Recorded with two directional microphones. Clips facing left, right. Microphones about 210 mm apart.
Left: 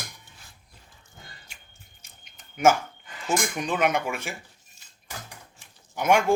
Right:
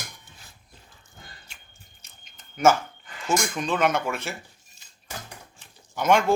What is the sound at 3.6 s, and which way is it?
Speech, 15° left (ahead or behind).